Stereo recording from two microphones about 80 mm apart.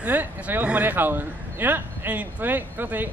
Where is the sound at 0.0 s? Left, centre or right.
Right.